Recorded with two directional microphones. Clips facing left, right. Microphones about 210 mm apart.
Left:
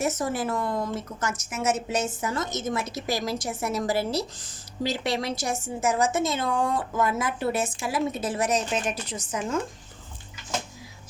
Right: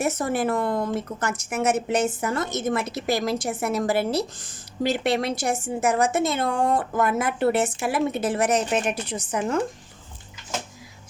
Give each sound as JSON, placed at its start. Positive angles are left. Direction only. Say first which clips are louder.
{"t": 0.0, "sound": "a woman's voice", "louder": "right 3 dB", "side_deg": -60}